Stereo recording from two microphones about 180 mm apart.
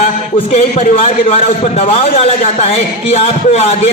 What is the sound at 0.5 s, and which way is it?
Speech, 35° left (ahead or behind).